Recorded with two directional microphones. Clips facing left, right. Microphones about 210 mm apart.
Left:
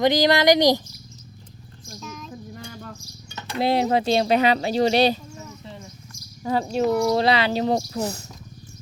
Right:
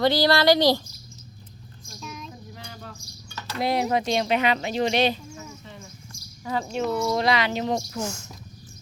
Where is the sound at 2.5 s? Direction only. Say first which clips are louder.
Left 4 dB; 50° left (ahead or behind).